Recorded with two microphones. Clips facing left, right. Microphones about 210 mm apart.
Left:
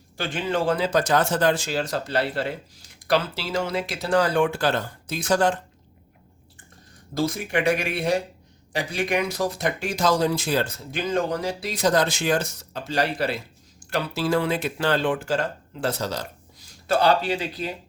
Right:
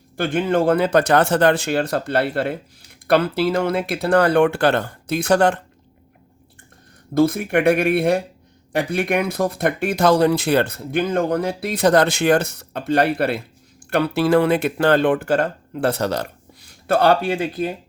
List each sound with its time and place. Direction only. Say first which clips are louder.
0.2 s speech: right 7 dB; 55° right (ahead or behind)
7.1 s speech: right 8 dB; 55° right (ahead or behind)